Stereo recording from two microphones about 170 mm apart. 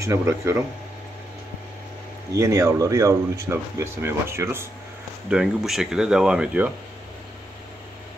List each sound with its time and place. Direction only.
0.0 s speech: 15° right (ahead or behind)
2.3 s speech: 20° right (ahead or behind)
5.3 s speech: centre (ahead or behind)